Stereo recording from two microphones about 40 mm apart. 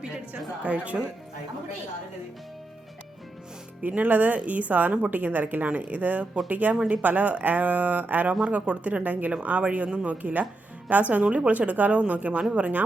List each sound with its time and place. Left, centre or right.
0.6 s a woman's voice: right
4.0 s a woman's voice: right
8.4 s a woman's voice: right